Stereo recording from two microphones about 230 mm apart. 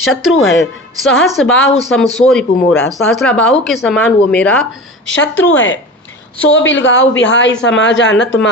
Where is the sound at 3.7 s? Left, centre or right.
Centre.